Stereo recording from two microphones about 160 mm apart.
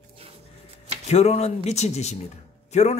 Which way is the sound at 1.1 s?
40° left (ahead or behind).